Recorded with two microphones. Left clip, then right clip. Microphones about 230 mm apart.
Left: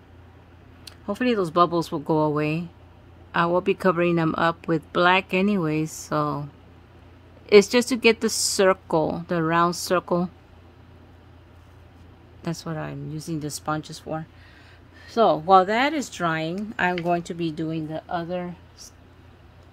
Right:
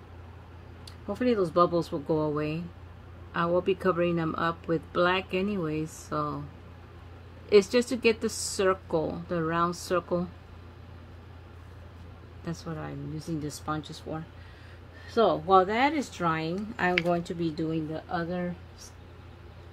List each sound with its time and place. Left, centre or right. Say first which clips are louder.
0.8 s speech: left 3 dB; left
7.4 s speech: left 6 dB; left
12.4 s speech: left 7 dB; left